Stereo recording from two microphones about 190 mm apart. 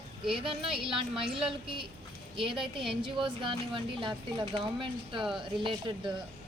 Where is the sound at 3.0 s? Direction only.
25° right (ahead or behind).